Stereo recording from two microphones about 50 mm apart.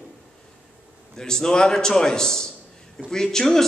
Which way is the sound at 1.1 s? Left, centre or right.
Centre.